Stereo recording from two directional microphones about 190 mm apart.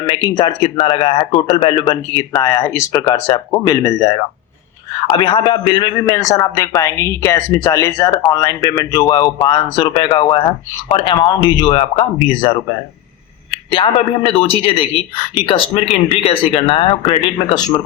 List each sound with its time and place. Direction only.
0.1 s a man's voice: 25° left (ahead or behind)
13.7 s a man's voice: 25° left (ahead or behind)